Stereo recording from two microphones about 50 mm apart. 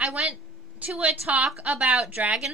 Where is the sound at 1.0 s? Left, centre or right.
Right.